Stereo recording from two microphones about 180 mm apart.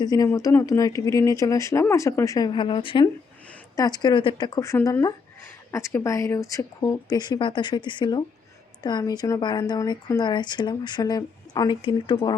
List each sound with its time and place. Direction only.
0.0 s speech: 20° left (ahead or behind)